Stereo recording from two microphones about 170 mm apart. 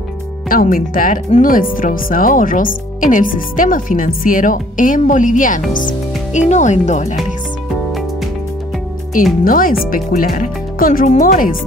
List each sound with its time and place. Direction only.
0.5 s speech: 55° left (ahead or behind)
9.4 s speech: 55° left (ahead or behind)